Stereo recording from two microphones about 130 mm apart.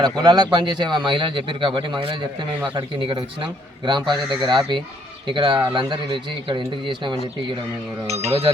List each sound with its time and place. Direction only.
0.0 s speech: 35° right (ahead or behind)
8.0 s speech: 55° right (ahead or behind)